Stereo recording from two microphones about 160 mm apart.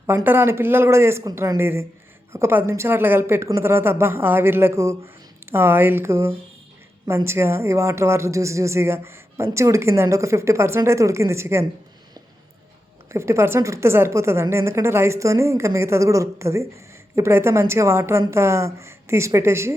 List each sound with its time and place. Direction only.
0.1 s speech: 15° right (ahead or behind)
13.1 s speech: 15° right (ahead or behind)